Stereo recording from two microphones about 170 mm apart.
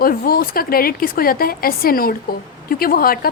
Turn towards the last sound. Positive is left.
turn(degrees=60)  # may be behind; listen again after turning